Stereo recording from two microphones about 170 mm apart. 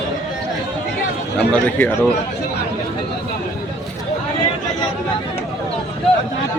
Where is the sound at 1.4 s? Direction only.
5° left (ahead or behind).